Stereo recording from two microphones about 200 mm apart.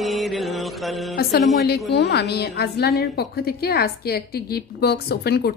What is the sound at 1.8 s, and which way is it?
A woman's voice, 55° left (ahead or behind).